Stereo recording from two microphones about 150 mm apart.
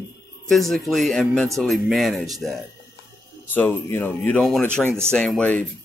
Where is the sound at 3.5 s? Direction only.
15° left (ahead or behind).